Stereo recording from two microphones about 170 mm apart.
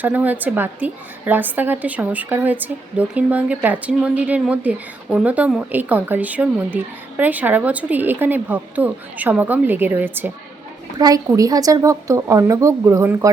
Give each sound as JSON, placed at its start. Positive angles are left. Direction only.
{"t": 0.0, "sound": "a woman's voice", "side_deg": -10}
{"t": 10.9, "sound": "a woman's voice", "side_deg": -20}